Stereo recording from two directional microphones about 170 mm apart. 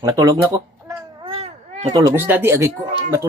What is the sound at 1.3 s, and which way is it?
Baby cry, 40° right (ahead or behind).